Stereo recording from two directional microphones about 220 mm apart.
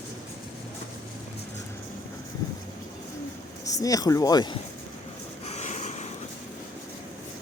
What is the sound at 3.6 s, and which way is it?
Speech, 15° left (ahead or behind).